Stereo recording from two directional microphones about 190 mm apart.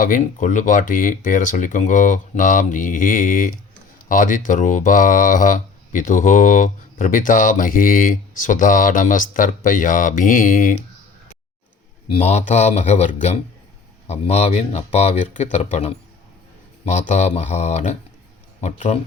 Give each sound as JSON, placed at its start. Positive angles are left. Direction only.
{"t": 0.0, "sound": "speech", "side_deg": 45}
{"t": 12.2, "sound": "speech", "side_deg": 40}